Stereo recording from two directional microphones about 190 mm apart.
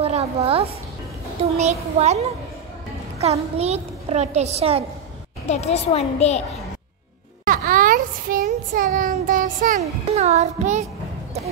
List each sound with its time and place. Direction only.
0.0 s a sound: 35° right (ahead or behind)
1.6 s a child's voice: 35° right (ahead or behind)
5.5 s a woman's voice: 35° left (ahead or behind)
7.4 s a child's voice: 45° right (ahead or behind)